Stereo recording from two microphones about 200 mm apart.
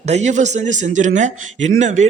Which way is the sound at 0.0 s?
35° right (ahead or behind).